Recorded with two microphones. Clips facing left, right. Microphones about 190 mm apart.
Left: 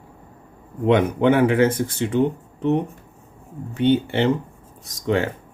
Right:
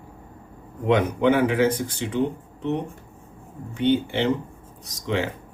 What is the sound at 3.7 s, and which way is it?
Speech, 60° left (ahead or behind).